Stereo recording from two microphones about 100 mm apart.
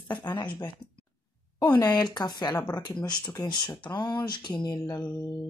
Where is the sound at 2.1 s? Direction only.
45° left (ahead or behind).